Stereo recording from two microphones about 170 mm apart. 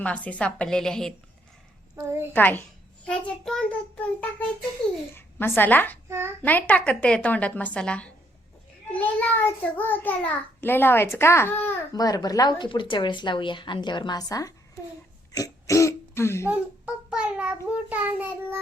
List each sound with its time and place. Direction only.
0.0 s a woman's voice: 10° left (ahead or behind)
2.0 s child singing: 15° right (ahead or behind)
2.3 s a child's voice: 10° left (ahead or behind)
5.1 s a woman's voice: 15° left (ahead or behind)
6.1 s child singing: 15° right (ahead or behind)
6.4 s a woman's voice: 10° left (ahead or behind)
16.5 s child singing: 5° right (ahead or behind)